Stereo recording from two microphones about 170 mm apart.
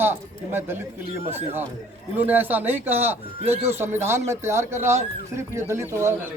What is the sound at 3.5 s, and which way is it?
Speech, 40° right (ahead or behind).